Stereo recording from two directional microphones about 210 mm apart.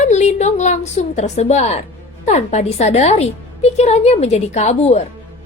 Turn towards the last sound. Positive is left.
turn(degrees=35)  # may be behind; listen again after turning